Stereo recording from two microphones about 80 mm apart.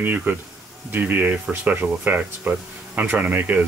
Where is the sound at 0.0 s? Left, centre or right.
Right.